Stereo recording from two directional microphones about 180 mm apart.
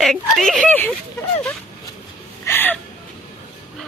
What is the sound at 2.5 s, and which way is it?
Whimper, 10° left (ahead or behind).